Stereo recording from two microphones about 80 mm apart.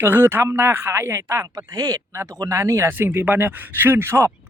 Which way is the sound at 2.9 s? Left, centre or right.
Right.